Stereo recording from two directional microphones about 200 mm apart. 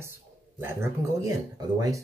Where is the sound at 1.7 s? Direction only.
15° right (ahead or behind).